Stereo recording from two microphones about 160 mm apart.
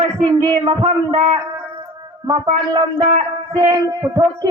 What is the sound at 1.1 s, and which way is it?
Speech, 50° right (ahead or behind).